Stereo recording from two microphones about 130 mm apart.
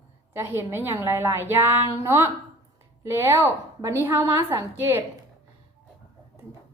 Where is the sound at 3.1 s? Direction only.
20° right (ahead or behind).